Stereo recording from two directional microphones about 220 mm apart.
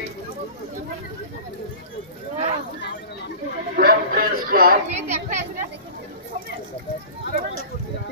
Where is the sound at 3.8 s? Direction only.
40° right (ahead or behind).